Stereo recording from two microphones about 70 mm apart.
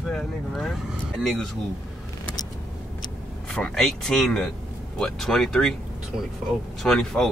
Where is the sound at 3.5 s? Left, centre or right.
Centre.